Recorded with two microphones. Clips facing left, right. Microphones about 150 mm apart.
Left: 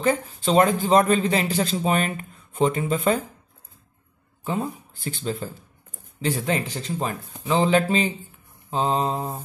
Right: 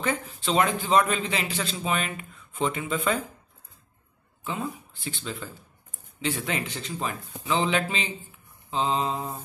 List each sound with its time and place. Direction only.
0.0 s speech: 40° left (ahead or behind)
4.5 s speech: 45° left (ahead or behind)